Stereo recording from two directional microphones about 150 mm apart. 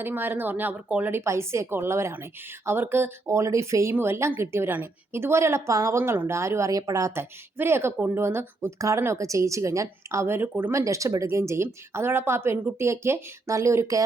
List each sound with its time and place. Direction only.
0.0 s a woman's voice: 15° right (ahead or behind)